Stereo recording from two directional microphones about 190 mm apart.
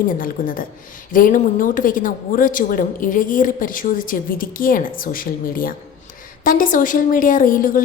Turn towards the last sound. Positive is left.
turn(degrees=45)  # may be behind; listen again after turning